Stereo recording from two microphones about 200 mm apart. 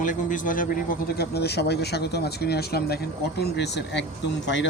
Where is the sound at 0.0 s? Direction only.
40° left (ahead or behind).